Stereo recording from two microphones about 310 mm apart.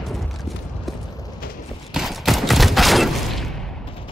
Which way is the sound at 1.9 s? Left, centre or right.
Centre.